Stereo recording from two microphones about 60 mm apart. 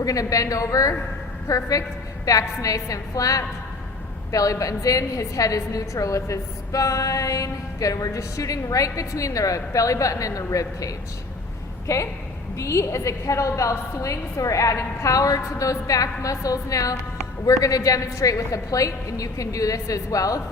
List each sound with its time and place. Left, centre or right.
0.0 s a woman's voice: left